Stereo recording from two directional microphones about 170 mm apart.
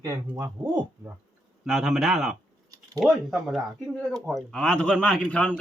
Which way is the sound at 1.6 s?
Centre (ahead or behind).